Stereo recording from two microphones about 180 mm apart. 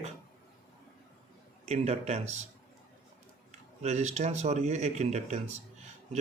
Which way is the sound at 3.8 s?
40° right (ahead or behind).